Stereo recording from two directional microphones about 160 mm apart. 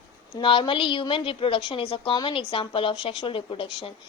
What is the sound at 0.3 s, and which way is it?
A woman's voice, 30° left (ahead or behind).